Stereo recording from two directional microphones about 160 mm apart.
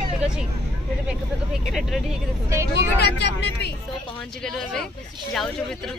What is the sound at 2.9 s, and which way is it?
Speech, 90° left.